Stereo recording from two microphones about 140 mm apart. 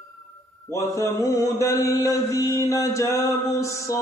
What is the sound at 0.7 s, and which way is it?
Mantra, 20° left (ahead or behind).